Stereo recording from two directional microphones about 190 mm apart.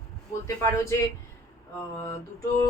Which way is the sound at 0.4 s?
15° left (ahead or behind).